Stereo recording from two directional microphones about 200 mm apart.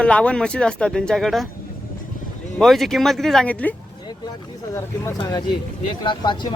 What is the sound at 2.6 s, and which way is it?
Speech, centre (ahead or behind).